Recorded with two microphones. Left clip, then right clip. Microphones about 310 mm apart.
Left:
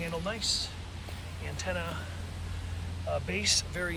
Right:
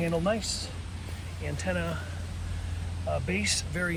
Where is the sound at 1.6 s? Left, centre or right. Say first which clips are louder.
Right 3 dB; centre.